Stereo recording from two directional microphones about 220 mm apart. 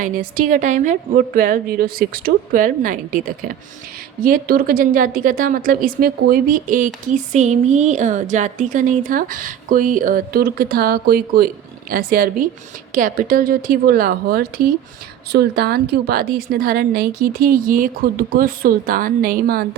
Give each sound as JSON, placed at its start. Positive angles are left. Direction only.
{"t": 0.0, "sound": "a woman's voice", "side_deg": -40}